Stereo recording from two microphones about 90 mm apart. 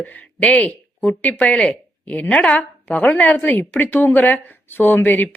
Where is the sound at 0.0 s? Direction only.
20° left (ahead or behind).